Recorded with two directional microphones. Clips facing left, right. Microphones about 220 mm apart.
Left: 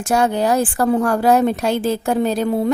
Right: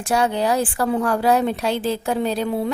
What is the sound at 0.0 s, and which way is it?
A woman's voice, 45° left (ahead or behind).